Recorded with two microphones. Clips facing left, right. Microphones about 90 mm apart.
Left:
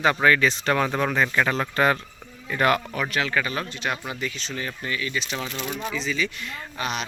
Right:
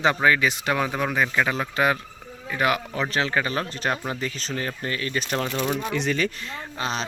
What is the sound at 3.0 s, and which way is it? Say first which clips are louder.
Speech: right 1 dB; 30° right (ahead or behind).